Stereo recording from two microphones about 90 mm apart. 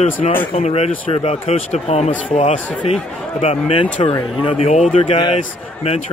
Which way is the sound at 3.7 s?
90° left.